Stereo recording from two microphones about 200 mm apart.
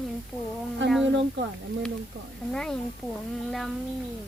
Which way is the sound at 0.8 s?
65° right (ahead or behind).